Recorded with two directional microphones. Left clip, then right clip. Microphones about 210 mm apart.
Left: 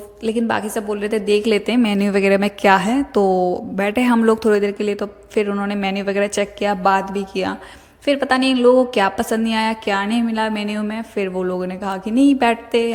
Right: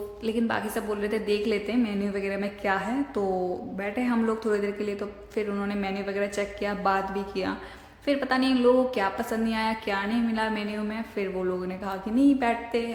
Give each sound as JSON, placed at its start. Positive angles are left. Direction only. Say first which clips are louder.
{"t": 0.3, "sound": "a woman's voice", "louder": "left 8 dB", "side_deg": 35}